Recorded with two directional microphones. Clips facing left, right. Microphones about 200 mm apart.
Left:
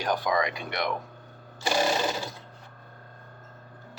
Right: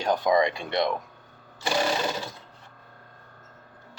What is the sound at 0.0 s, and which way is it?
Speech, 25° right (ahead or behind).